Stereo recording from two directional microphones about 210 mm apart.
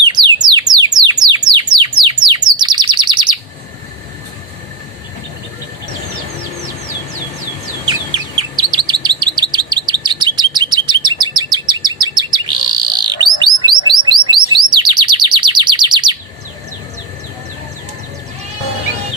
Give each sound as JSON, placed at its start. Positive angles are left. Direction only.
{"t": 0.0, "sound": "a sound", "side_deg": -20}
{"t": 1.2, "sound": "bird", "side_deg": -20}
{"t": 7.9, "sound": "chirp", "side_deg": -20}
{"t": 11.5, "sound": "bird", "side_deg": -20}